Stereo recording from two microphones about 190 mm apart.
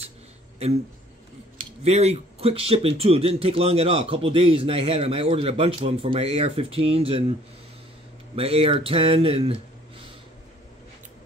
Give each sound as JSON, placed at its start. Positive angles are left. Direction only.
{"t": 1.6, "sound": "speech", "side_deg": -35}
{"t": 8.4, "sound": "speech", "side_deg": -30}